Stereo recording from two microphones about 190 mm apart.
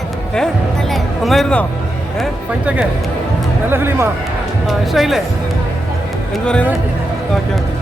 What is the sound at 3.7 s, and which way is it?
Speech, 10° right (ahead or behind).